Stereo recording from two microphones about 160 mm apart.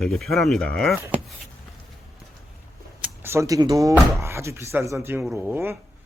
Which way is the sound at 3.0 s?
15° right (ahead or behind).